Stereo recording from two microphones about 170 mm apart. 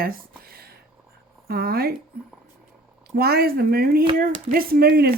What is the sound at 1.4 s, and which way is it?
Speech, 65° right (ahead or behind).